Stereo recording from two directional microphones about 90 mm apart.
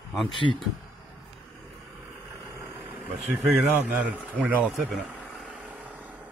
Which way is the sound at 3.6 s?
20° right (ahead or behind).